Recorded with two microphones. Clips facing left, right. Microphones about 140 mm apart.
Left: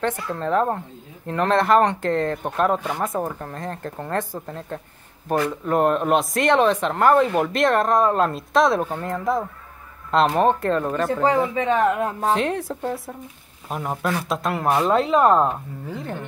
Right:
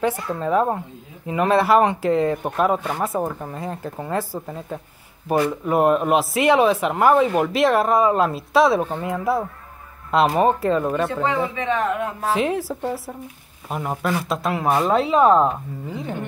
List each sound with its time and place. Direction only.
0.0 s speech: 5° right (ahead or behind)
11.2 s speech: 35° left (ahead or behind)
12.3 s speech: 5° right (ahead or behind)